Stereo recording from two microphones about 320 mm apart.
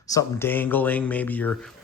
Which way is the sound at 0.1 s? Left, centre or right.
Centre.